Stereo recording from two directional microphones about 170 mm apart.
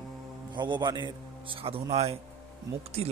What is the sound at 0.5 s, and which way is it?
A man's voice, 25° right (ahead or behind).